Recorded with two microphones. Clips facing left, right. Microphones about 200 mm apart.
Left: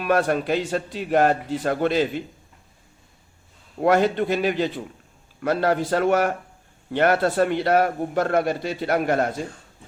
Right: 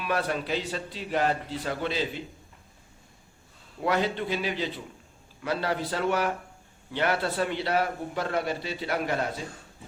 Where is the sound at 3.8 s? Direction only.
50° left (ahead or behind).